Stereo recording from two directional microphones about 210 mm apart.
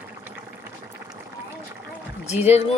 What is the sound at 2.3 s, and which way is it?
Speech, 30° left (ahead or behind).